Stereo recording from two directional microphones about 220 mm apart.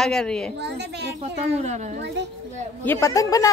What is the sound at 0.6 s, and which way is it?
Speech, 50° right (ahead or behind).